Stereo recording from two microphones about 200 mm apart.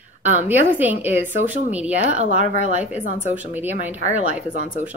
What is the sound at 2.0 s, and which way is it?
Speech, 35° right (ahead or behind).